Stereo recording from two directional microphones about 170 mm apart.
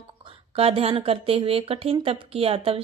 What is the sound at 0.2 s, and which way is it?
Speech, 30° right (ahead or behind).